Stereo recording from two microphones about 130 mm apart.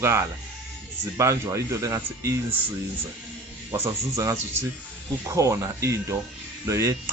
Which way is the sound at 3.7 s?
20° right (ahead or behind).